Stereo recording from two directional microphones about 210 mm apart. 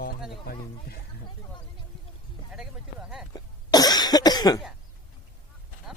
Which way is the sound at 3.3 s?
20° left (ahead or behind).